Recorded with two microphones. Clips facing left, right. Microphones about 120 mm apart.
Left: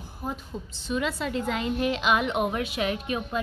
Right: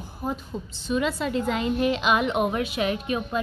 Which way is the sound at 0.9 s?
25° right (ahead or behind).